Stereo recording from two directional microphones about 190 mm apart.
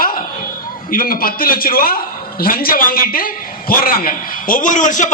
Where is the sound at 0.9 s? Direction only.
50° left (ahead or behind).